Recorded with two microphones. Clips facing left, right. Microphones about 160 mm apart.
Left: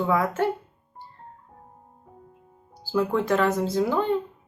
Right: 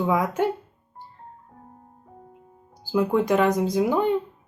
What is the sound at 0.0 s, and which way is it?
Speech, 15° right (ahead or behind).